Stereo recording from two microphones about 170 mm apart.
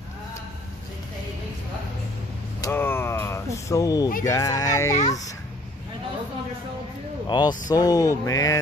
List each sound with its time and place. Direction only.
2.6 s a sound: 15° left (ahead or behind)
4.2 s speech: 20° left (ahead or behind)
7.2 s speech: 25° left (ahead or behind)